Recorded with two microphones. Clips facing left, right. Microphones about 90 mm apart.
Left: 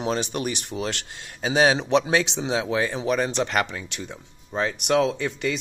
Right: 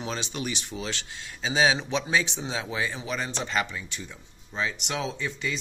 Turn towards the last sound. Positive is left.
turn(degrees=60)  # may be behind; listen again after turning